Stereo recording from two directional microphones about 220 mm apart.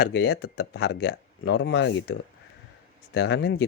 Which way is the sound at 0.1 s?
65° left (ahead or behind).